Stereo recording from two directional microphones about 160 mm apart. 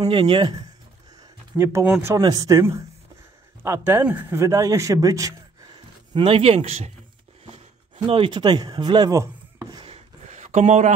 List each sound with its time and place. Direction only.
0.0 s speech: 30° right (ahead or behind)
1.6 s a man's voice: 15° right (ahead or behind); by 6.9 s 40° right (ahead or behind)
8.1 s speech: 30° right (ahead or behind)
10.2 s a sound: 50° right (ahead or behind)